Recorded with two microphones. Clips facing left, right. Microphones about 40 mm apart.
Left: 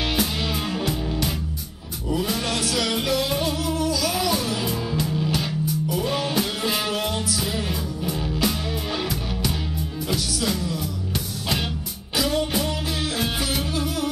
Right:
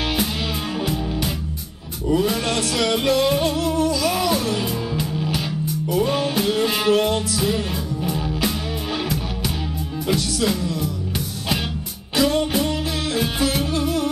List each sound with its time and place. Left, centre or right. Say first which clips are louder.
0.7 s music: right 2 dB; centre
2.0 s music: right 5 dB; centre
10.0 s music: right 5 dB; centre
12.2 s music: right 4 dB; centre
12.5 s music: right 3 dB; centre
13.8 s music: right 4 dB; centre